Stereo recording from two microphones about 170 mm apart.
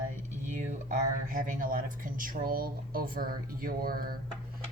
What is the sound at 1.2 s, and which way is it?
Speech, 55° right (ahead or behind).